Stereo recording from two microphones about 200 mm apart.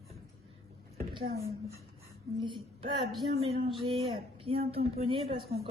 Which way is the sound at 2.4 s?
25° right (ahead or behind).